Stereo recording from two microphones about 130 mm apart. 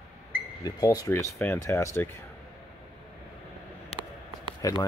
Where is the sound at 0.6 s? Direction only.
30° left (ahead or behind).